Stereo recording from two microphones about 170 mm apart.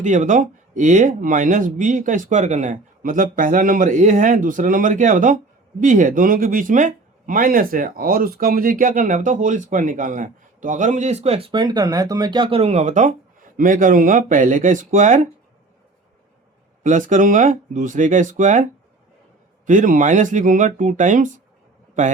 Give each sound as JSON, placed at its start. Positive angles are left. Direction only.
{"t": 0.0, "sound": "speech", "side_deg": -45}
{"t": 16.8, "sound": "speech", "side_deg": -50}
{"t": 19.6, "sound": "speech", "side_deg": -50}